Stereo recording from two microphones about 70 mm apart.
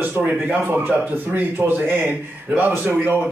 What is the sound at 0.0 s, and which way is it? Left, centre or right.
A man's voice, right.